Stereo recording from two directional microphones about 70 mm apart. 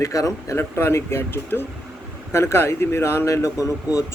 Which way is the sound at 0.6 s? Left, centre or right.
Left.